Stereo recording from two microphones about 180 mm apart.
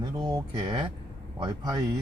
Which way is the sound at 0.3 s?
20° right (ahead or behind).